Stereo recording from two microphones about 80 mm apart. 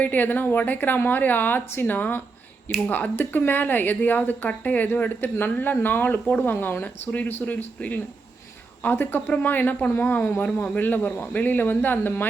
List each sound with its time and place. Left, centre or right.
0.0 s speech: left